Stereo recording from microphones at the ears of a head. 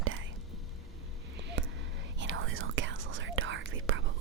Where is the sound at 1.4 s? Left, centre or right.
Right.